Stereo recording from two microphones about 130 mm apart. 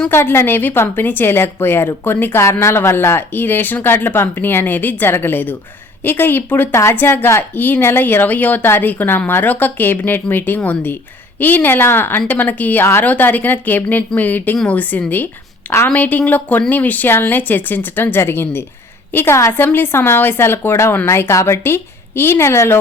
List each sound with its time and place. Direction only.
0.1 s speech: 15° left (ahead or behind)